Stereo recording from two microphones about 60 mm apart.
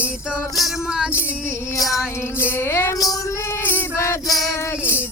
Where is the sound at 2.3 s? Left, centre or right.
Left.